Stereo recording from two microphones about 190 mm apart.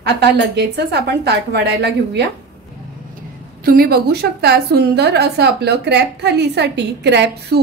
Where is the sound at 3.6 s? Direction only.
50° right (ahead or behind).